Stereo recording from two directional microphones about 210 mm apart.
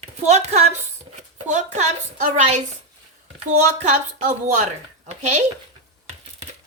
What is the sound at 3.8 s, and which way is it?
A woman's voice, 35° right (ahead or behind).